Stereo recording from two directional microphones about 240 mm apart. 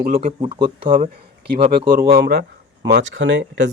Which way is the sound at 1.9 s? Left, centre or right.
Right.